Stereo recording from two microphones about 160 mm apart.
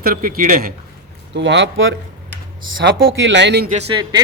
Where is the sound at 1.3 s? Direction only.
90° right.